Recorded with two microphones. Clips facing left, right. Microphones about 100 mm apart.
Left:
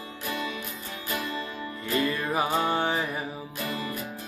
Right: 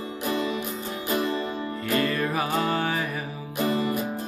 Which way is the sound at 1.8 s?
20° left (ahead or behind).